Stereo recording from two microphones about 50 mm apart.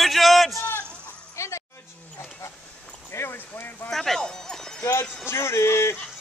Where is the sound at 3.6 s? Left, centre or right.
Left.